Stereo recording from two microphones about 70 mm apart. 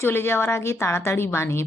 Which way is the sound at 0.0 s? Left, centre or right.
Left.